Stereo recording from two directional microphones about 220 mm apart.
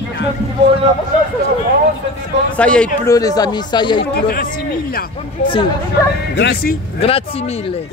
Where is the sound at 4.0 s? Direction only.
45° left (ahead or behind).